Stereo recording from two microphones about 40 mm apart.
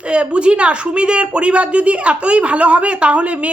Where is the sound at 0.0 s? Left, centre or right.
Right.